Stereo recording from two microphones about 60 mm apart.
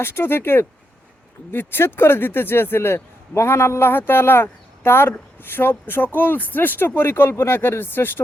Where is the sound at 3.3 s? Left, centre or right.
Left.